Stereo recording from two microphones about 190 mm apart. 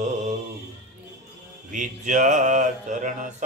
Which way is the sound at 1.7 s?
40° right (ahead or behind).